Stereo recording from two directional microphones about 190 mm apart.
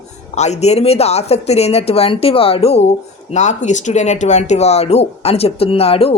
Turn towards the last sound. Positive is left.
turn(degrees=30)  # may be behind; listen again after turning